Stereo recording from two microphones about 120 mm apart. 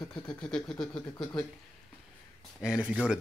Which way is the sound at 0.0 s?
35° left (ahead or behind).